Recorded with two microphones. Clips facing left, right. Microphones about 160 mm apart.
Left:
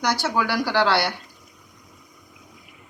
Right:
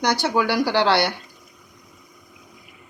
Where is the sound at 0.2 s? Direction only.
25° right (ahead or behind).